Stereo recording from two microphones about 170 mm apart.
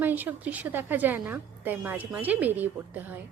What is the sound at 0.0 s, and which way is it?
A woman's voice, 10° right (ahead or behind).